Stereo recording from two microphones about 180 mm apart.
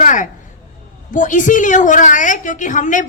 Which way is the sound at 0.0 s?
45° left (ahead or behind).